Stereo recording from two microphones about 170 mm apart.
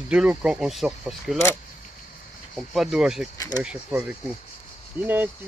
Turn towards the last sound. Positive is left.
turn(degrees=-10)  # may be behind; listen again after turning